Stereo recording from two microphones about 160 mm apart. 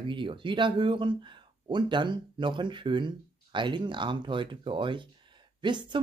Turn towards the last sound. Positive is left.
turn(degrees=-30)  # may be behind; listen again after turning